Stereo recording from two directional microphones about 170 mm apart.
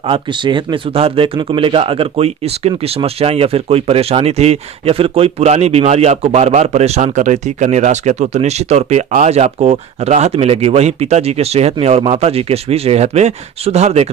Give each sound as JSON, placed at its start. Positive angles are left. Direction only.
{"t": 0.1, "sound": "speech", "side_deg": -30}